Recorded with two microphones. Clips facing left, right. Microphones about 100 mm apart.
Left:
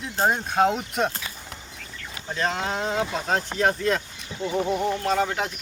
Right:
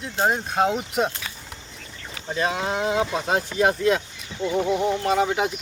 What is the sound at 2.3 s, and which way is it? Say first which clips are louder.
Speech: right 2 dB; 10° right (ahead or behind).